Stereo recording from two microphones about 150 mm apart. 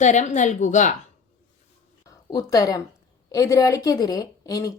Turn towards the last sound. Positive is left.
turn(degrees=25)  # may be behind; listen again after turning